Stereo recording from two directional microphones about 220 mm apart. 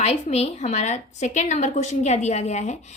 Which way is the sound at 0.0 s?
30° left (ahead or behind).